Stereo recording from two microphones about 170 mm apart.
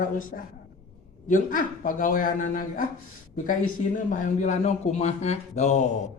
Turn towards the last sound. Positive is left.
turn(degrees=40)  # may be behind; listen again after turning